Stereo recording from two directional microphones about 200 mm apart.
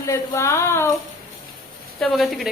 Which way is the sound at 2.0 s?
Centre (ahead or behind).